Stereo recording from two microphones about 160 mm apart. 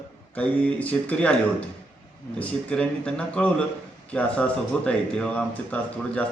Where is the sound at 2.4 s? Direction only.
10° left (ahead or behind).